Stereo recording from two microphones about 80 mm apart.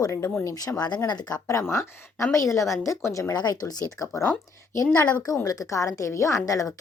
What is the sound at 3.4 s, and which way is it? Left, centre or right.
A woman's voice, left.